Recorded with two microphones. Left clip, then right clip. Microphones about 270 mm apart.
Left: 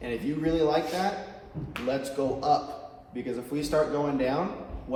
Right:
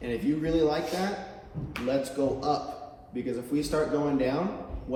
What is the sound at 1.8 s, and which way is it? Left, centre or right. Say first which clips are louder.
A man's voice: right 1 dB; left.